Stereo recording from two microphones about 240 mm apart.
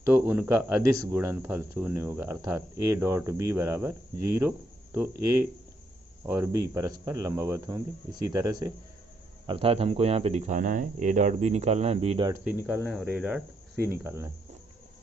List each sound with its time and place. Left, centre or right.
0.0 s speech: centre
12.3 s speech: centre